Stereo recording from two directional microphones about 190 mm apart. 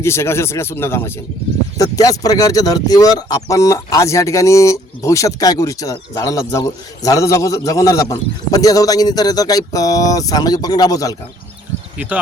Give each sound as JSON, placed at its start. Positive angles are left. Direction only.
{"t": 0.0, "sound": "speech", "side_deg": 15}
{"t": 11.9, "sound": "speech", "side_deg": -10}